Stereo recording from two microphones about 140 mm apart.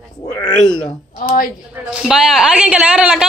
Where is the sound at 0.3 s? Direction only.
30° left (ahead or behind).